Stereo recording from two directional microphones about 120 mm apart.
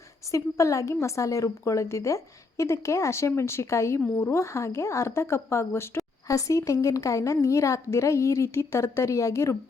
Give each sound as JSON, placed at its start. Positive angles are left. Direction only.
{"t": 0.3, "sound": "a woman's voice", "side_deg": 25}